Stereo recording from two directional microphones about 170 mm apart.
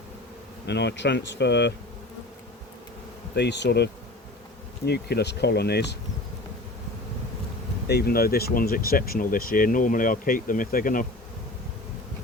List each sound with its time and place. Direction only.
0.7 s speech: 85° left
3.3 s speech: 85° left
4.9 s speech: 70° left (ahead or behind)
7.9 s speech: 70° left (ahead or behind)